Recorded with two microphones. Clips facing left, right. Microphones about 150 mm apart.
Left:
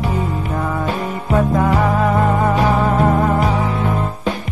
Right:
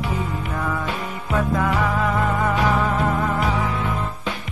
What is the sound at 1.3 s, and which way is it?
Music, 30° left (ahead or behind).